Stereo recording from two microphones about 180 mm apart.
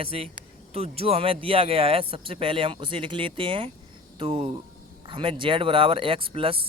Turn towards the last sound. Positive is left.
turn(degrees=-30)  # may be behind; listen again after turning